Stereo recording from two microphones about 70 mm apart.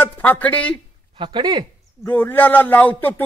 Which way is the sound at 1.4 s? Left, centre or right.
Right.